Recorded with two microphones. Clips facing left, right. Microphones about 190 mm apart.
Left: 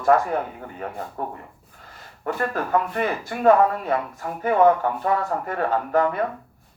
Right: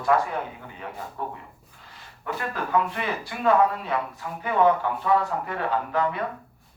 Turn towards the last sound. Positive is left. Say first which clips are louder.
# left 4 dB
turn(degrees=45)  # may be behind; listen again after turning